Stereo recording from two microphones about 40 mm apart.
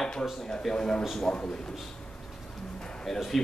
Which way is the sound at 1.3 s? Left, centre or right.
Centre.